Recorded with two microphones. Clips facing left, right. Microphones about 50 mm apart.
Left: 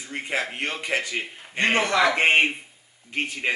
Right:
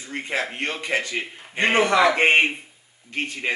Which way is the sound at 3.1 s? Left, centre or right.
Centre.